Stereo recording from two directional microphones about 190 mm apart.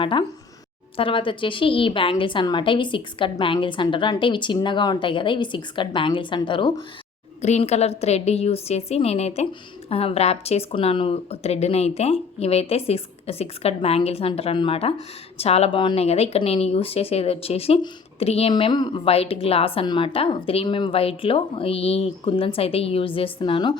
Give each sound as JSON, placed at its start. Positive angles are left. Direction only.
{"t": 0.0, "sound": "a woman's voice", "side_deg": 25}